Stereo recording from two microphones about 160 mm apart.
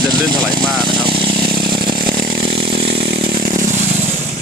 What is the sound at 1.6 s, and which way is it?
Chainsaw, 30° right (ahead or behind).